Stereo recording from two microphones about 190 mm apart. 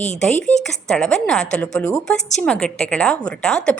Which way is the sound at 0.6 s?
Centre (ahead or behind).